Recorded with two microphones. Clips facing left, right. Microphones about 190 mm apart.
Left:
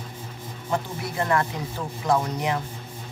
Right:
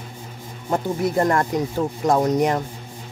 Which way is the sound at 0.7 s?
45° right (ahead or behind).